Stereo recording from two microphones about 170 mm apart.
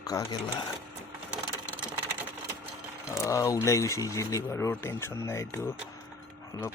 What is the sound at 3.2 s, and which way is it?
Speech, 20° left (ahead or behind).